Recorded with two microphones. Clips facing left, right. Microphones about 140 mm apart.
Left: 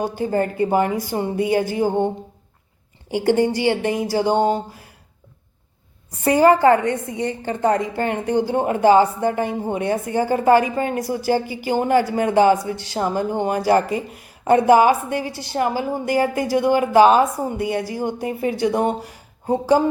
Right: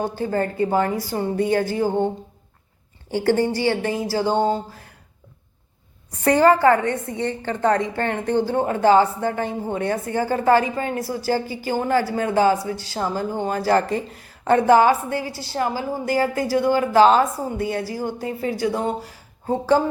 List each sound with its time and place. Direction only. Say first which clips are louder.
0.3 s a woman's voice: left 2 dB; 15° left (ahead or behind)
3.1 s a woman's voice: left 2 dB; 15° left (ahead or behind)
6.2 s a woman's voice: left 1 dB; 10° left (ahead or behind)